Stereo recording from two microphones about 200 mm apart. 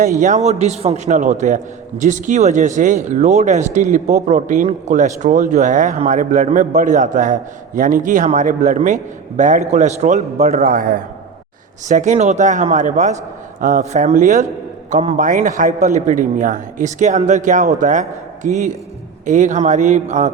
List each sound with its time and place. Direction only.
0.2 s a man's voice: 35° right (ahead or behind)
10.6 s a man's voice: 45° right (ahead or behind)